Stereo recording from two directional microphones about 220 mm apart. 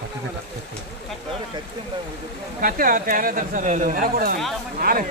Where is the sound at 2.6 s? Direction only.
40° right (ahead or behind).